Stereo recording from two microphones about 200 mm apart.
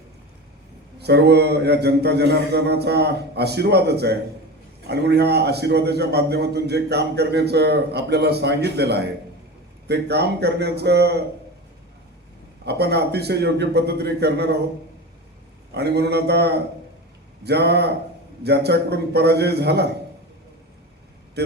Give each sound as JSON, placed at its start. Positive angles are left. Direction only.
{"t": 0.9, "sound": "a man's voice", "side_deg": -55}
{"t": 12.6, "sound": "a man's voice", "side_deg": -55}
{"t": 15.7, "sound": "a man's voice", "side_deg": -55}
{"t": 21.4, "sound": "a man's voice", "side_deg": -55}